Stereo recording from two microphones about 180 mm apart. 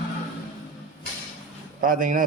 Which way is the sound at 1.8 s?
50° right (ahead or behind).